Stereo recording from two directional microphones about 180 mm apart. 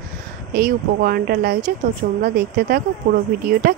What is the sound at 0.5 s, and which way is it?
A woman's voice, 55° right (ahead or behind).